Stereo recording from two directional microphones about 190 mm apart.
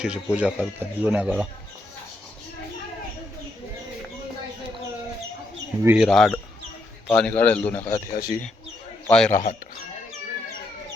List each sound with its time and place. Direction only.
0.0 s speech: 5° right (ahead or behind)
5.8 s speech: 10° right (ahead or behind)
6.1 s speech: centre (ahead or behind)
8.1 s speech: 55° left (ahead or behind)
9.0 s speech: 5° left (ahead or behind)